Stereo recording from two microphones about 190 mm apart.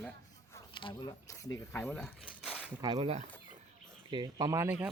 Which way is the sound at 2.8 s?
20° right (ahead or behind).